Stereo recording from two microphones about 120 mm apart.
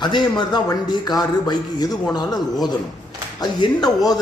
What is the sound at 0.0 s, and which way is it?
A man's voice, 35° left (ahead or behind).